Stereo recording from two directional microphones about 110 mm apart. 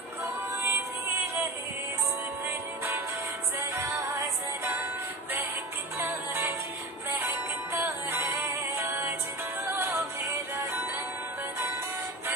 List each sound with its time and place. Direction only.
0.2 s music: 20° right (ahead or behind)
3.5 s music: 30° right (ahead or behind)
5.9 s music: 20° right (ahead or behind)
7.7 s music: 20° right (ahead or behind)